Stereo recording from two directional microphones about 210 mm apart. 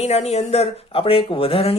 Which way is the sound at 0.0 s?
30° left (ahead or behind).